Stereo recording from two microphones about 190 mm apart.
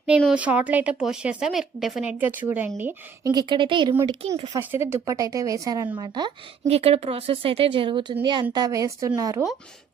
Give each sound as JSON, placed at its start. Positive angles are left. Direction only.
{"t": 0.2, "sound": "a woman's voice", "side_deg": -5}
{"t": 4.5, "sound": "a woman's voice", "side_deg": -15}